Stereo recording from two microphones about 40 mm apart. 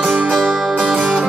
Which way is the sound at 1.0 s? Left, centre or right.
Right.